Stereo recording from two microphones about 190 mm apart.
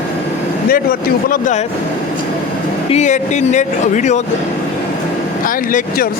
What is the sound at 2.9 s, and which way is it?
Speech, 40° left (ahead or behind).